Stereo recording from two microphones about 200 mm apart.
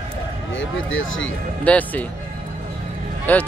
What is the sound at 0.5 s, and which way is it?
Speech, 75° left (ahead or behind).